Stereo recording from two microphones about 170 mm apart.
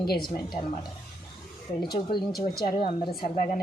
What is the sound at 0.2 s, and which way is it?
Speech, 25° left (ahead or behind).